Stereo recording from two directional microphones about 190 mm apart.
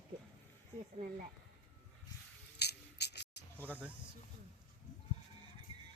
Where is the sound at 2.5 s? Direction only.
60° left (ahead or behind).